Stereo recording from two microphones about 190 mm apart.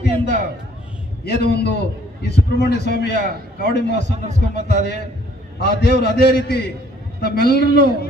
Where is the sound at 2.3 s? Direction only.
60° left (ahead or behind).